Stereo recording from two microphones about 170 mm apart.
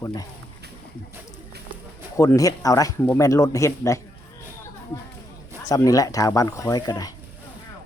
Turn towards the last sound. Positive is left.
turn(degrees=25)  # may be behind; listen again after turning